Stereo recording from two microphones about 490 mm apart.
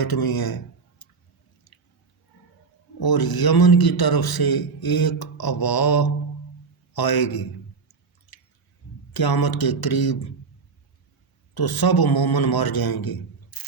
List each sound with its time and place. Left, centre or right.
0.0 s speech: left
3.0 s a man's voice: left
9.1 s a man's voice: left
11.5 s a man's voice: left